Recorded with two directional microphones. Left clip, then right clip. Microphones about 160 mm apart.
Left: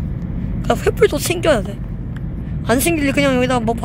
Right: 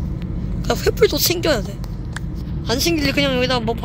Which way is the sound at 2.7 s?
15° left (ahead or behind).